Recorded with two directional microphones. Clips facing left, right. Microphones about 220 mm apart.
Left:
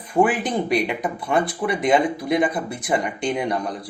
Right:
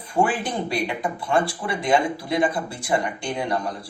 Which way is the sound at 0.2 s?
20° left (ahead or behind).